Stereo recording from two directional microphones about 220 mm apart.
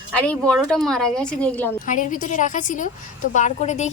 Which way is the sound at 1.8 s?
35° left (ahead or behind).